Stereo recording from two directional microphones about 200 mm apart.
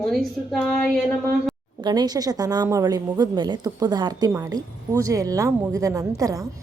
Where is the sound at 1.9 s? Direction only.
20° right (ahead or behind).